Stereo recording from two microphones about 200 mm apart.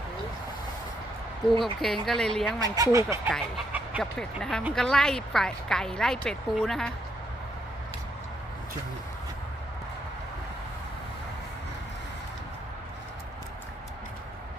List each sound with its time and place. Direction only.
1.6 s speech: centre (ahead or behind)
2.6 s speech: 20° right (ahead or behind)
3.2 s speech: 5° right (ahead or behind)